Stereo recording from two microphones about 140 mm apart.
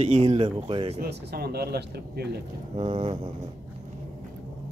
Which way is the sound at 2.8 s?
45° right (ahead or behind).